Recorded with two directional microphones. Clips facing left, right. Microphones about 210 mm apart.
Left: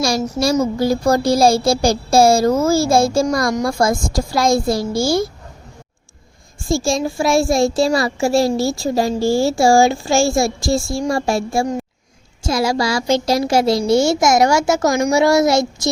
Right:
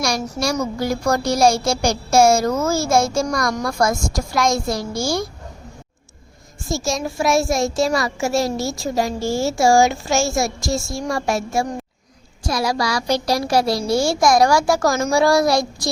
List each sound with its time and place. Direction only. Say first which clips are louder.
0.0 s a child's voice: left 4 dB; 25° left (ahead or behind)
6.7 s a child's voice: left 5 dB; 30° left (ahead or behind)